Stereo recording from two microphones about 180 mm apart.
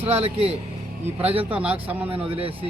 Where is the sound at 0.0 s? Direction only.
35° right (ahead or behind).